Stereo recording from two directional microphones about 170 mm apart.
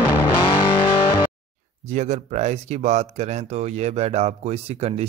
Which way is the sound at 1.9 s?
45° right (ahead or behind).